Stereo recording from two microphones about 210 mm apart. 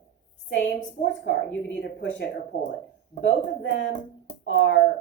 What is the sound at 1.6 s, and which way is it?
Speech, 60° left (ahead or behind).